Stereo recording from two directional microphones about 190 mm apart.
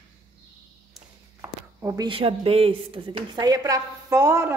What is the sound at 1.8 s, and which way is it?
A woman's voice, 20° right (ahead or behind).